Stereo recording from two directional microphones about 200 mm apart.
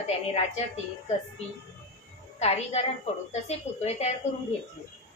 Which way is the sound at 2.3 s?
35° left (ahead or behind).